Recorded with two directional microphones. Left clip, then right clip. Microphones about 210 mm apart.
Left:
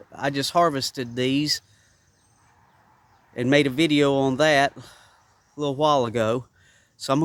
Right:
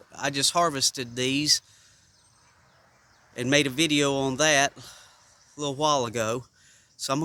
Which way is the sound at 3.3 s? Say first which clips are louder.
Left 3 dB; 30° left (ahead or behind).